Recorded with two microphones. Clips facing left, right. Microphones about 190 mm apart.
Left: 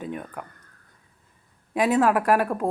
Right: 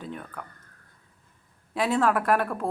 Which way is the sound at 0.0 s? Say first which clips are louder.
Left 4 dB; 15° left (ahead or behind).